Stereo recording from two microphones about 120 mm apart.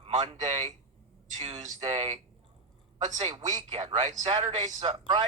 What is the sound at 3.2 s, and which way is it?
Speech, 45° right (ahead or behind).